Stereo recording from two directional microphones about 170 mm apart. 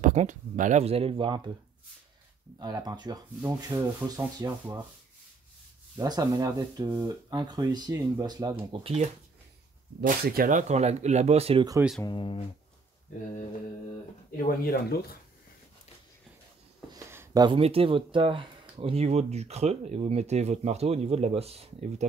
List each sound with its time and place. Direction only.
0.0 s speech: 45° right (ahead or behind); by 1.4 s 30° right (ahead or behind)
2.6 s speech: 25° right (ahead or behind)
5.9 s speech: 20° right (ahead or behind)
8.7 s speech: 35° right (ahead or behind)
10.0 s speech: 55° right (ahead or behind); by 11.6 s 35° right (ahead or behind)
12.0 s speech: 30° left (ahead or behind)
14.3 s speech: 60° left (ahead or behind)
16.9 s a sound: 15° right (ahead or behind)
17.6 s speech: 35° right (ahead or behind)